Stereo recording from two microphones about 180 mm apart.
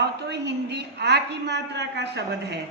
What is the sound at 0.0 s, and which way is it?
A woman's voice, 70° right (ahead or behind).